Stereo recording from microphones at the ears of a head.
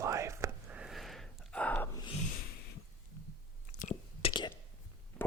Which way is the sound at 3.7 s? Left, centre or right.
Left.